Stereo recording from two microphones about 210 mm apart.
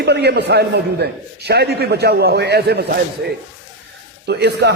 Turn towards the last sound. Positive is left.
turn(degrees=-55)  # may be behind; listen again after turning